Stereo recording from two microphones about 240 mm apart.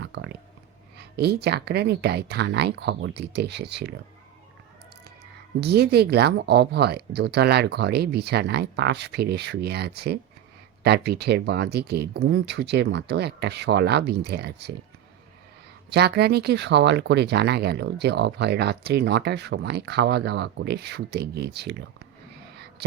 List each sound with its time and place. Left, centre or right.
0.0 s a sound: right
0.9 s speech: right
5.5 s speech: right
15.9 s speech: right